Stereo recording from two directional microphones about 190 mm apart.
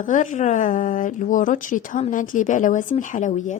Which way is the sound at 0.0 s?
45° left (ahead or behind).